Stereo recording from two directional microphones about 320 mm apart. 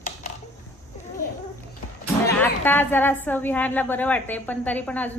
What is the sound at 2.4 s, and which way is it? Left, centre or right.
A woman's voice, centre.